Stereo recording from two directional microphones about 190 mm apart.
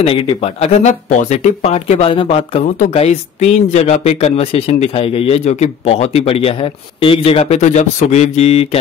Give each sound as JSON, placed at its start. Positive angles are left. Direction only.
{"t": 0.0, "sound": "speech", "side_deg": 30}